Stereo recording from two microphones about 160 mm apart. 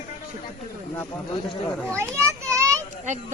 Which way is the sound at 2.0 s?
20° right (ahead or behind).